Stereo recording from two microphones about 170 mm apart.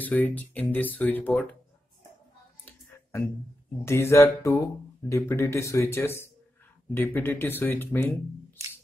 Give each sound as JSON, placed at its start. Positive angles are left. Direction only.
{"t": 0.0, "sound": "speech", "side_deg": 10}
{"t": 2.6, "sound": "a sound", "side_deg": 15}
{"t": 3.8, "sound": "speech", "side_deg": 15}